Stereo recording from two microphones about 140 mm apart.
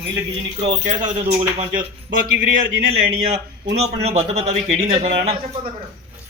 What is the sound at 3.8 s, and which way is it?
A man's voice, 50° right (ahead or behind).